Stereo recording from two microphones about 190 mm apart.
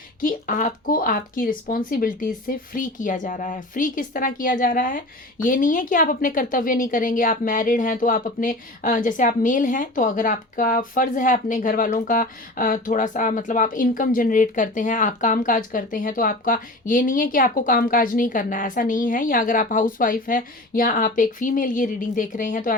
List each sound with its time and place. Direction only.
0.2 s speech: 45° left (ahead or behind)